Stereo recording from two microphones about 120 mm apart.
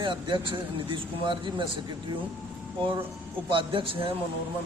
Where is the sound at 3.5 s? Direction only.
45° right (ahead or behind).